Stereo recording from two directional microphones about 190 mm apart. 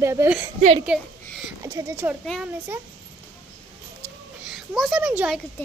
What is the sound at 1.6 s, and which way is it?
Speech, 15° right (ahead or behind).